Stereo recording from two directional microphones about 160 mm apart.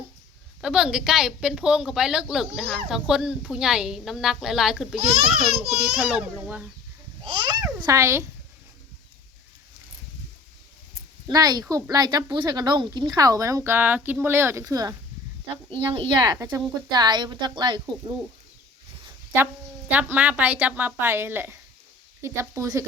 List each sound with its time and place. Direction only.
0.6 s a woman's voice: 5° right (ahead or behind)
7.3 s a child's voice: 30° right (ahead or behind)
11.3 s speech: 25° right (ahead or behind)
19.9 s speech: 10° right (ahead or behind)